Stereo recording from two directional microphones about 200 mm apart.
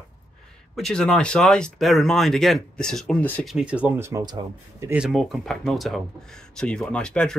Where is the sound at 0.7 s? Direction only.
Centre (ahead or behind).